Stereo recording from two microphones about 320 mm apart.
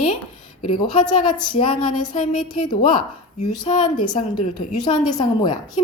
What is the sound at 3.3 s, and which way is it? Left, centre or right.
A woman's voice, left.